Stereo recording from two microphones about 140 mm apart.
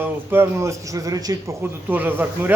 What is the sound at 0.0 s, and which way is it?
A man's voice, 15° right (ahead or behind).